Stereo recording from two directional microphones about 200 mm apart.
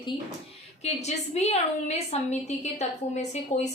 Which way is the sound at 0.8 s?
35° left (ahead or behind).